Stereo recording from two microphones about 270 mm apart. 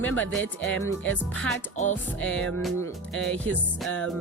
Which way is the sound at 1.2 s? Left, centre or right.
Centre.